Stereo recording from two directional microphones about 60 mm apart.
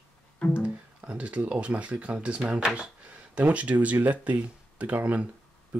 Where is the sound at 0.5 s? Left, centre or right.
Centre.